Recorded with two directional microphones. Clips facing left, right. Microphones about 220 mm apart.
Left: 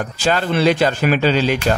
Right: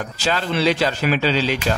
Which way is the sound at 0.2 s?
50° left (ahead or behind).